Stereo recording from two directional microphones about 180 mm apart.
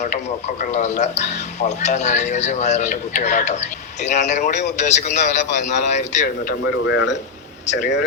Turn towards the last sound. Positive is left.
turn(degrees=45)  # may be behind; listen again after turning